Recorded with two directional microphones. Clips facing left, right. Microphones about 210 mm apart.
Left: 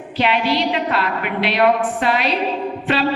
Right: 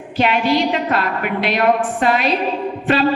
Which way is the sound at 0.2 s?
45° right (ahead or behind).